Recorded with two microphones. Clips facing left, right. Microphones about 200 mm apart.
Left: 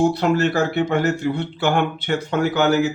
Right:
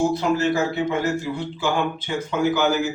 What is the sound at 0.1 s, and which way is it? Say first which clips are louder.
A man's voice: left 2 dB; 65° left (ahead or behind).